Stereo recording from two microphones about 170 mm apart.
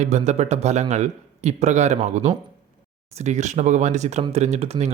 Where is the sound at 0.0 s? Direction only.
40° right (ahead or behind).